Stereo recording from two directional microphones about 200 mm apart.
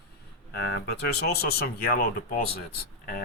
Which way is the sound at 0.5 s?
55° left (ahead or behind).